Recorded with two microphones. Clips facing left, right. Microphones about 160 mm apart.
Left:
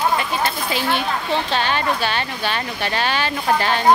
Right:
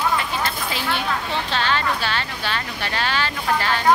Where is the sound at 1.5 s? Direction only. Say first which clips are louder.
Left 2 dB; 15° left (ahead or behind).